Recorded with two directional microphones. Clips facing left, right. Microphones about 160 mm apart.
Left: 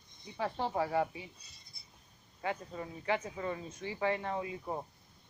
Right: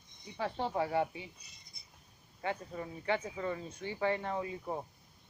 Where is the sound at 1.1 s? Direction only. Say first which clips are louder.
Right 1 dB; 25° right (ahead or behind).